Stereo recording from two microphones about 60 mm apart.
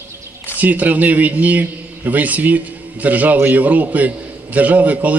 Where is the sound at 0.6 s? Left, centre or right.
Right.